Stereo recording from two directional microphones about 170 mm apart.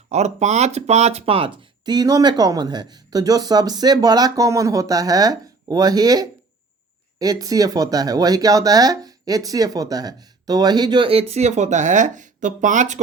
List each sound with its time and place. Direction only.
0.1 s speech: 40° right (ahead or behind)